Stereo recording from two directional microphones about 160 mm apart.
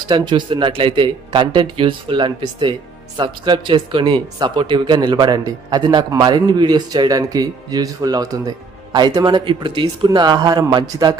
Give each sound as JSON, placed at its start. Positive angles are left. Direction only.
{"t": 0.1, "sound": "speech", "side_deg": -30}